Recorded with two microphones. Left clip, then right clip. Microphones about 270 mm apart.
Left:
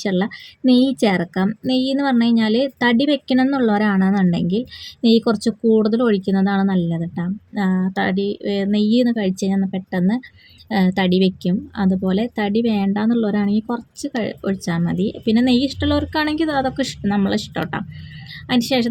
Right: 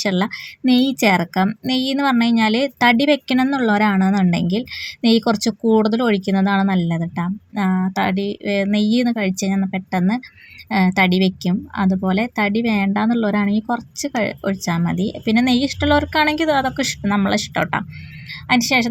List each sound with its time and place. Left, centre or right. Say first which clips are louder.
0.0 s speech: right 1 dB; centre
8.2 s speech: right 1 dB; right
8.6 s speech: left 4 dB; centre